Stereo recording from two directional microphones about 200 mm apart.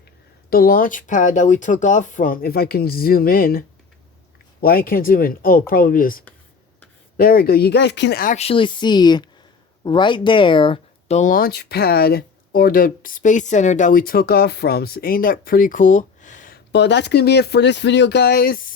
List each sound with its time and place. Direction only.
0.5 s speech: 45° left (ahead or behind)
4.6 s speech: 45° left (ahead or behind)
8.2 s speech: 35° left (ahead or behind)
11.2 s speech: 45° left (ahead or behind)
16.7 s speech: 60° left (ahead or behind)